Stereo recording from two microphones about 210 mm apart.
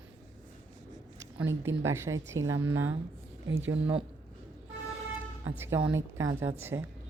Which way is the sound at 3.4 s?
65° right (ahead or behind).